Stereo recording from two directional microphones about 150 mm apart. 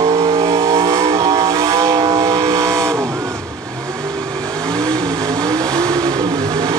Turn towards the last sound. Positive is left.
turn(degrees=-25)  # may be behind; listen again after turning